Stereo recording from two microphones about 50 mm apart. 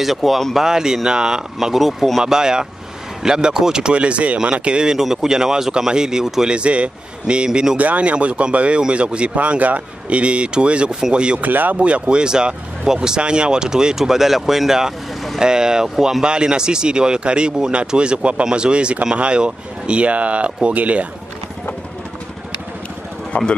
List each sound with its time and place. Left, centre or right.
0.0 s speech: centre
0.6 s speech: centre
6.5 s speech: right
7.7 s speech: right
11.4 s speech: right
11.8 s speech: right
23.3 s speech: left